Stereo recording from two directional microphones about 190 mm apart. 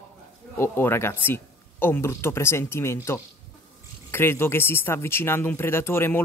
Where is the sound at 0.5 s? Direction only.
10° left (ahead or behind).